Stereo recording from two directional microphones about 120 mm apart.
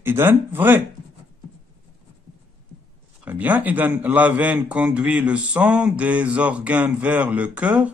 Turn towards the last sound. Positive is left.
turn(degrees=-10)  # may be behind; listen again after turning